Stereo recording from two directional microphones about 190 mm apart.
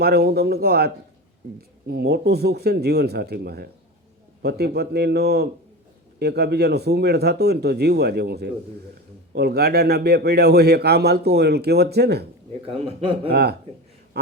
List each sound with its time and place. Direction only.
0.0 s a man's voice: 55° right (ahead or behind)
12.8 s a man's voice: 30° right (ahead or behind)
13.3 s a man's voice: 60° right (ahead or behind)